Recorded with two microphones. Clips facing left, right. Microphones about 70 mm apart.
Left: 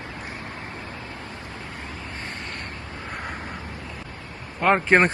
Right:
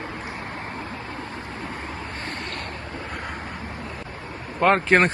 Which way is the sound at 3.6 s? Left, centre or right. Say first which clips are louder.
Right 3 dB; right.